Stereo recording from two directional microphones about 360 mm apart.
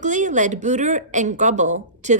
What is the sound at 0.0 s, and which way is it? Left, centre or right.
Speech, right.